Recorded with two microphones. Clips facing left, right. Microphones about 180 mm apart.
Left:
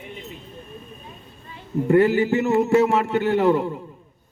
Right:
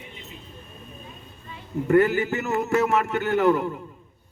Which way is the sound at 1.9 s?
30° left (ahead or behind).